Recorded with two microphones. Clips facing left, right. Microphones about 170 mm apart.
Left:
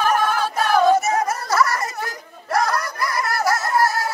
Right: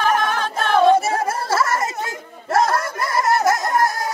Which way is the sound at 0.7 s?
30° right (ahead or behind).